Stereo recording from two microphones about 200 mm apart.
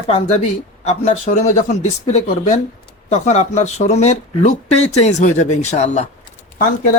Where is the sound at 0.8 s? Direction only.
35° left (ahead or behind).